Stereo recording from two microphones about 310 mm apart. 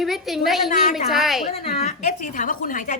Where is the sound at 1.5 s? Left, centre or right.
Centre.